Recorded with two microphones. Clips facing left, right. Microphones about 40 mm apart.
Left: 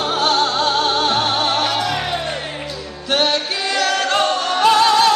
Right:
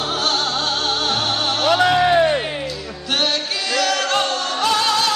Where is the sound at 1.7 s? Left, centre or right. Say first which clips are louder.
Right 5 dB; right.